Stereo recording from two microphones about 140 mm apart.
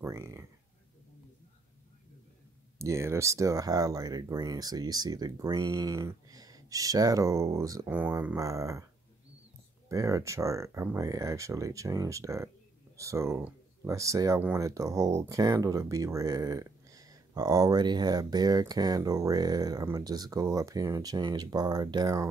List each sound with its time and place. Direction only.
0.0 s speech: 20° right (ahead or behind)
2.8 s speech: 20° right (ahead or behind)
9.8 s speech: 20° right (ahead or behind)